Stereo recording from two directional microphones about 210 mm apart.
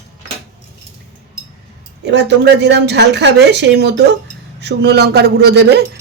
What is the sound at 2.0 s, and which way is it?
Speech, 55° right (ahead or behind).